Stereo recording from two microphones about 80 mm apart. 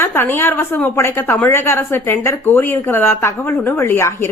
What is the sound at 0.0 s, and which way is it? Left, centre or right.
A woman's voice, left.